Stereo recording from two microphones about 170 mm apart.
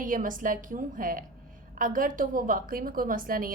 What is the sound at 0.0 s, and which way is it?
A woman's voice, 50° right (ahead or behind).